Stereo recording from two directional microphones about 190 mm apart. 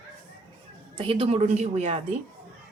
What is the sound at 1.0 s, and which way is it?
Speech, 30° right (ahead or behind).